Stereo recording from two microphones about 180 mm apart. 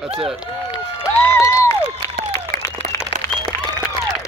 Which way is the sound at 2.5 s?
55° right (ahead or behind).